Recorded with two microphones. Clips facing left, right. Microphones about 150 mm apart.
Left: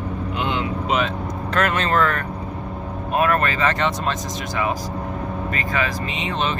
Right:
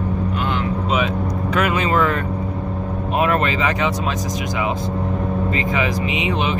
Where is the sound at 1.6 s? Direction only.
10° right (ahead or behind).